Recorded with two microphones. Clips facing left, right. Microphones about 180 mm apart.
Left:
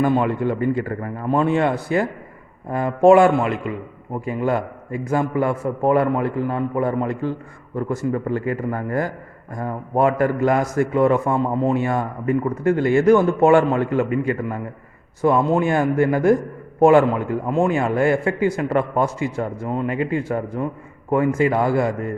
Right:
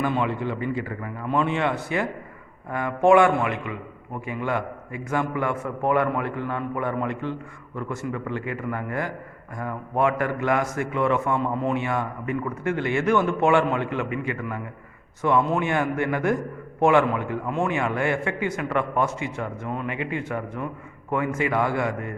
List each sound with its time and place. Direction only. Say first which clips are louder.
0.0 s a man's voice: left 6 dB; 45° left (ahead or behind)